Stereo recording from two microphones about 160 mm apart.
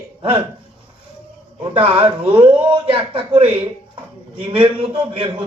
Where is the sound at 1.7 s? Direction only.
35° right (ahead or behind).